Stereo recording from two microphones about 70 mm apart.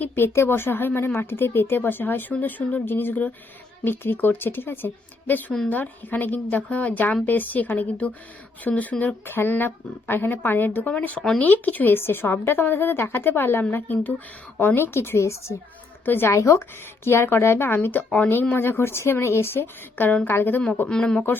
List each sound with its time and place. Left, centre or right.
0.3 s speech: left
14.8 s speech: left
16.0 s speech: left
16.3 s speech: left
20.8 s speech: centre